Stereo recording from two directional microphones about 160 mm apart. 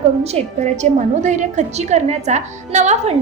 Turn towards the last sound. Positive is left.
turn(degrees=-45)  # may be behind; listen again after turning